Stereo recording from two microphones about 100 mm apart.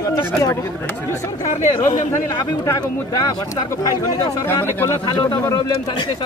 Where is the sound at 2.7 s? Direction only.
35° left (ahead or behind).